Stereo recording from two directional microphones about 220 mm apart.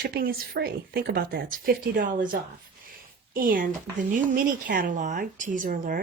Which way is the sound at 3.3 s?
40° right (ahead or behind).